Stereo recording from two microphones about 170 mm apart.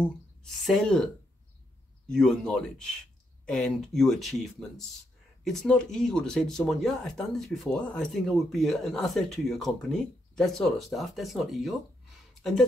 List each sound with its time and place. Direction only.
0.4 s speech: 5° left (ahead or behind)